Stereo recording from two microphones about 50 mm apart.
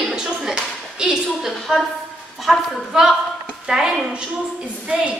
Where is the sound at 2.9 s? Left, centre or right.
Centre.